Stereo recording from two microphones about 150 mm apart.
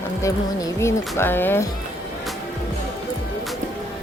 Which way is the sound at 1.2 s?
15° left (ahead or behind).